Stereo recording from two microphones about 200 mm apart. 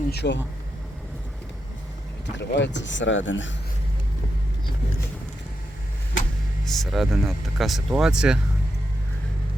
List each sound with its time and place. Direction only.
0.1 s speech: 55° left (ahead or behind)
2.2 s speech: 60° left (ahead or behind)
6.7 s speech: centre (ahead or behind)